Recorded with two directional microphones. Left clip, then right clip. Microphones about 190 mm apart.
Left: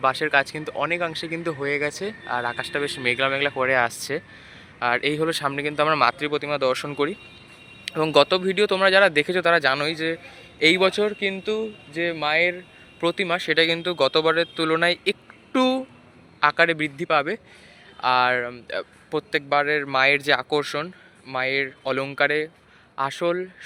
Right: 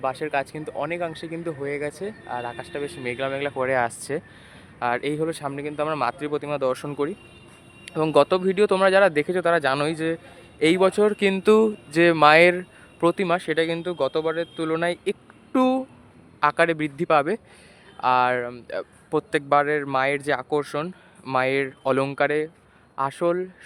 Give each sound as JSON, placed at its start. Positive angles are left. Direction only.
{"t": 0.0, "sound": "speech", "side_deg": 0}
{"t": 11.2, "sound": "speech", "side_deg": -35}
{"t": 13.0, "sound": "speech", "side_deg": -20}
{"t": 19.3, "sound": "speech", "side_deg": -25}
{"t": 21.2, "sound": "speech", "side_deg": -25}